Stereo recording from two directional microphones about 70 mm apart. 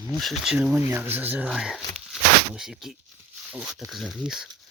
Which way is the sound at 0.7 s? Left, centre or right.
Right.